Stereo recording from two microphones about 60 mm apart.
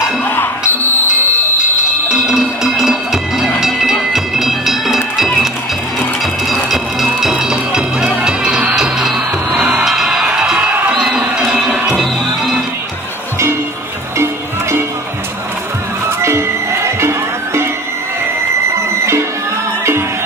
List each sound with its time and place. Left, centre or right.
0.2 s music: left
2.0 s music: centre
6.5 s music: centre
7.3 s music: centre
9.8 s music: centre
10.9 s crowd: centre
11.5 s music: centre
14.1 s music: right
16.2 s music: right